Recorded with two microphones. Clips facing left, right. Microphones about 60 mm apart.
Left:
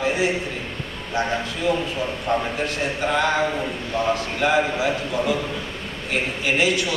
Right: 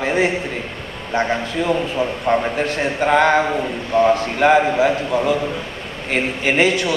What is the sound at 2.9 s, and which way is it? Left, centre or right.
Speech, right.